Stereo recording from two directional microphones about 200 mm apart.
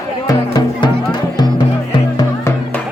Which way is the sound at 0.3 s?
20° left (ahead or behind).